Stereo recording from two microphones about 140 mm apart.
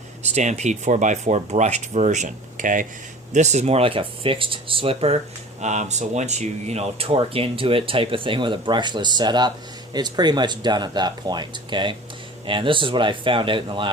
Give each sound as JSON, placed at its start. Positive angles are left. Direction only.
{"t": 0.2, "sound": "speech", "side_deg": -55}
{"t": 3.3, "sound": "speech", "side_deg": -55}
{"t": 5.5, "sound": "speech", "side_deg": -55}